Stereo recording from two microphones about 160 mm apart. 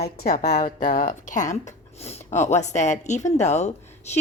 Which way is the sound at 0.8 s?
55° left (ahead or behind).